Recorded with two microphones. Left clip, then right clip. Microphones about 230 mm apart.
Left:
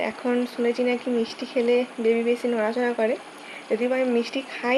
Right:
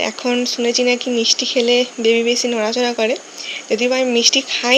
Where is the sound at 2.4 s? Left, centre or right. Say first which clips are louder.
Right 6 dB; right.